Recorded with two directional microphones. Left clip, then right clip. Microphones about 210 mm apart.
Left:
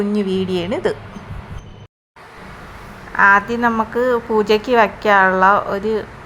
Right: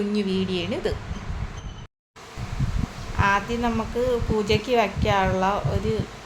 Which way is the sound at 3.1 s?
20° left (ahead or behind).